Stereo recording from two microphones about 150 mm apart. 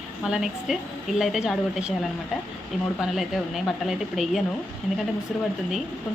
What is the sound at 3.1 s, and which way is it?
Speech, centre (ahead or behind).